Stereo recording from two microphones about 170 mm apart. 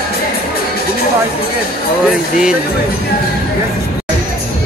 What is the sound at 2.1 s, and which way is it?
Speech, 5° right (ahead or behind).